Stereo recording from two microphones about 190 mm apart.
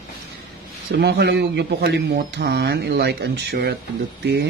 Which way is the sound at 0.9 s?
60° right (ahead or behind).